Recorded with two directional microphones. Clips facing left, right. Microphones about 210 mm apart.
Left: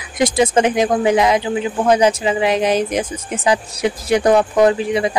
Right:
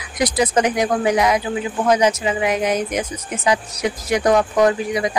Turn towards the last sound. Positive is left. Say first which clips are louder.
# left 3 dB
turn(degrees=30)  # may be behind; listen again after turning